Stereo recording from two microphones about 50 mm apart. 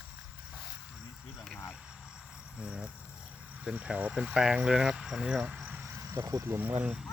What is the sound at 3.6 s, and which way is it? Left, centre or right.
Speech, right.